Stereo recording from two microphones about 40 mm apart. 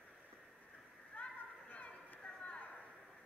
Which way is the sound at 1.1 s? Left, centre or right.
Left.